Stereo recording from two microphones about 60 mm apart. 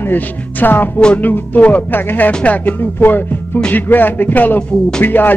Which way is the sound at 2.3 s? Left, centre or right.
Left.